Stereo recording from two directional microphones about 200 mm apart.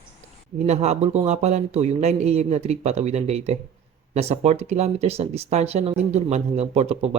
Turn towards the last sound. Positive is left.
turn(degrees=-30)  # may be behind; listen again after turning